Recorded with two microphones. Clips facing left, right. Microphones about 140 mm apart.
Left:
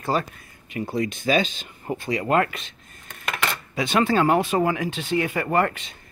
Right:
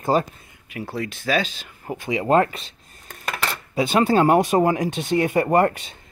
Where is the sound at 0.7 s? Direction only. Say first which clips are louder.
Left 3 dB; 5° right (ahead or behind).